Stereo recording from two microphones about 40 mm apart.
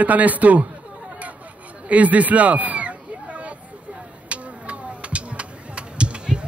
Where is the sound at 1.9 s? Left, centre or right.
Right.